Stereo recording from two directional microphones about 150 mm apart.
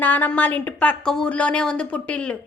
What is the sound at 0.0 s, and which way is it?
A woman's voice, 10° left (ahead or behind).